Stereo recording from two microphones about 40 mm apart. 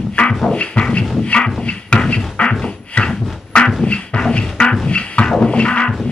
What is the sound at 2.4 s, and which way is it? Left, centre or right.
Beatboxing, left.